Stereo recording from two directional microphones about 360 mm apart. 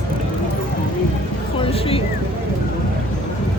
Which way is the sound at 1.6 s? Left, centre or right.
Centre.